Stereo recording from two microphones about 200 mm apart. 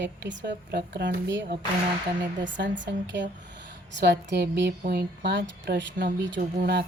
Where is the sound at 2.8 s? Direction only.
65° right (ahead or behind).